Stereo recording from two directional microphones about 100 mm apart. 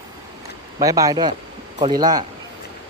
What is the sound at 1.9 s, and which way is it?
Speech, 40° right (ahead or behind).